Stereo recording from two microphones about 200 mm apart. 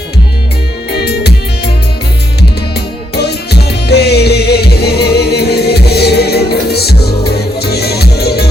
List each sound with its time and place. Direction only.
0.9 s music: 55° left (ahead or behind)
2.7 s music: 55° left (ahead or behind)